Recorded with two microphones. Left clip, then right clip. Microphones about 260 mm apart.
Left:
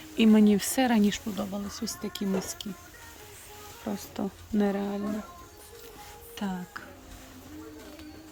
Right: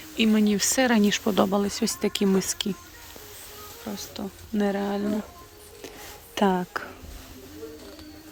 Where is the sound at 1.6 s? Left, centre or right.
Centre.